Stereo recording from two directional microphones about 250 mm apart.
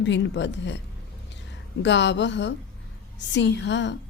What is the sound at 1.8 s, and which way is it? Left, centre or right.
A woman's voice, left.